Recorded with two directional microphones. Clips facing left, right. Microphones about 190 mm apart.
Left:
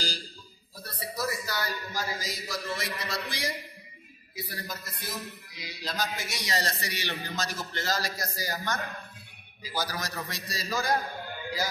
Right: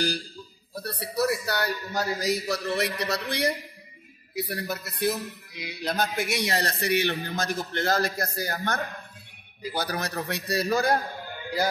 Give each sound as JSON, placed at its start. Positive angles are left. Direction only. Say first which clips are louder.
{"t": 0.7, "sound": "a man's voice", "louder": "right 8 dB", "side_deg": -65}